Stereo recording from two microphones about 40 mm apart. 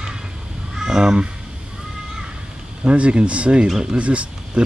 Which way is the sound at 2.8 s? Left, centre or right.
Right.